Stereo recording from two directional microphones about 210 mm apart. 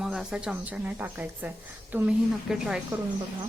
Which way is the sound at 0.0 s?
Centre (ahead or behind).